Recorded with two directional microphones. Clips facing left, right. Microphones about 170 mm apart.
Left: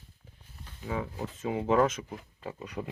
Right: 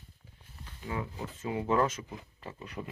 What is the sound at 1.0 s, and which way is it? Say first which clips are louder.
Speech: left 3 dB; 20° left (ahead or behind).